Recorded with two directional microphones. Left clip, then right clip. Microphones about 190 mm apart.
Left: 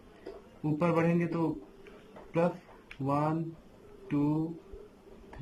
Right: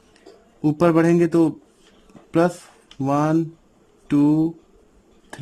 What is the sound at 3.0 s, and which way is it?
Speech, 75° right (ahead or behind).